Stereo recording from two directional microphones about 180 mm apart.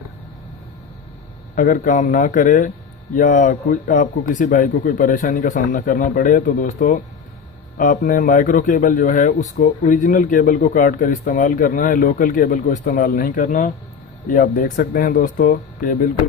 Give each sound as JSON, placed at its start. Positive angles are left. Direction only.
{"t": 1.5, "sound": "a man's voice", "side_deg": 45}